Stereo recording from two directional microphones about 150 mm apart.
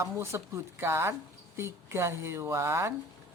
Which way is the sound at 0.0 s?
15° right (ahead or behind).